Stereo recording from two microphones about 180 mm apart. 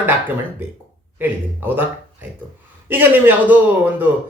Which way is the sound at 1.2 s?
10° right (ahead or behind).